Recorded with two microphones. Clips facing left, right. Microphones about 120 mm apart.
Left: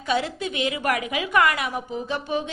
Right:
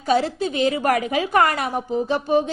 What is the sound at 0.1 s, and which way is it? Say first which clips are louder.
A woman's voice: right 5 dB; 35° right (ahead or behind).